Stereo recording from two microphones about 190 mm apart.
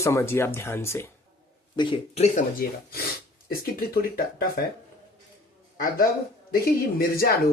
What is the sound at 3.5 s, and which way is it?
A man's voice, 50° left (ahead or behind).